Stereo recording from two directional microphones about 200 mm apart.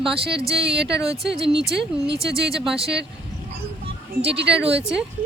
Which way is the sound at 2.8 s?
55° right (ahead or behind).